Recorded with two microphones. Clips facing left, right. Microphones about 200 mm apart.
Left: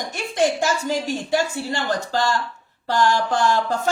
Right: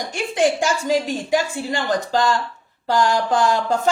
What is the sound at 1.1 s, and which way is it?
A woman's voice, 15° right (ahead or behind).